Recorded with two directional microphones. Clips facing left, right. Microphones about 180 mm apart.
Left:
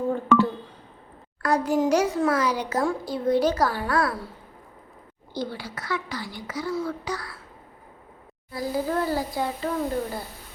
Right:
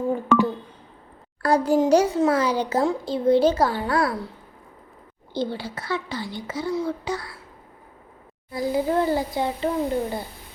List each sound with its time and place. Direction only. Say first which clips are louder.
0.1 s telephone dialing: even; 10° right (ahead or behind)
1.4 s a child's voice: right 3 dB; 30° right (ahead or behind)
5.3 s a child's voice: right 4 dB; 25° right (ahead or behind)
8.5 s a child's voice: right 4 dB; 20° right (ahead or behind)